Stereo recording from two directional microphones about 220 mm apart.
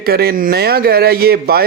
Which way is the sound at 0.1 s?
45° right (ahead or behind).